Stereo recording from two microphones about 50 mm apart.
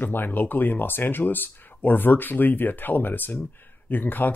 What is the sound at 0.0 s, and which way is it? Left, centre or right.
Speech, left.